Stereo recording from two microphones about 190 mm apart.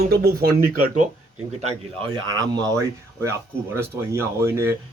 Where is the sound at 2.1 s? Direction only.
20° right (ahead or behind).